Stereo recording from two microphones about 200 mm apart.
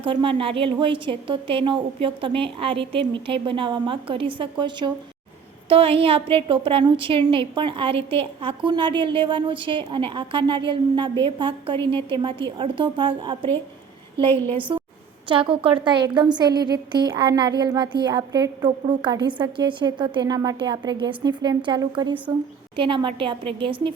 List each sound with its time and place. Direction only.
0.0 s a woman's voice: 25° right (ahead or behind)
15.3 s a woman's voice: 25° right (ahead or behind)